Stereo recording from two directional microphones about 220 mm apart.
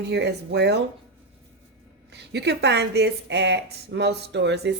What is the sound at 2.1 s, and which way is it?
A woman's voice, 50° right (ahead or behind).